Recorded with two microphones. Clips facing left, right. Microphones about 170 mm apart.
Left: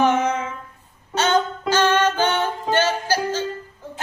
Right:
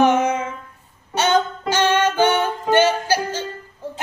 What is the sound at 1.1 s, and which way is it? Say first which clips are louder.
Music: right 1 dB; 15° right (ahead or behind).